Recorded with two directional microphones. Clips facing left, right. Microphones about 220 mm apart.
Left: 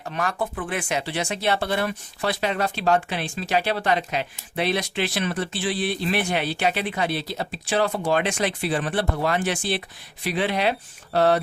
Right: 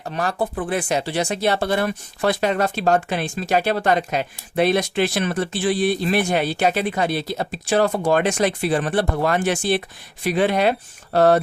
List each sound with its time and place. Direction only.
0.1 s speech: 35° right (ahead or behind)